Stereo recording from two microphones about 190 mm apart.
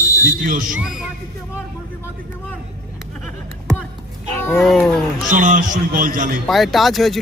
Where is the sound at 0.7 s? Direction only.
Centre (ahead or behind).